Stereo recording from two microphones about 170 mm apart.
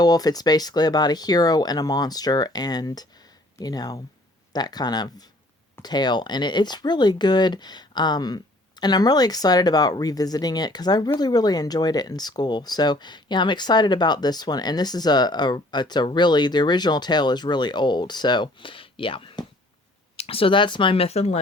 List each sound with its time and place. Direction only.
0.0 s speech: 25° left (ahead or behind); by 21.3 s 40° left (ahead or behind)